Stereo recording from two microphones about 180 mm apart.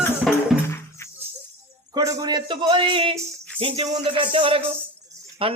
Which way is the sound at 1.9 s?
20° right (ahead or behind).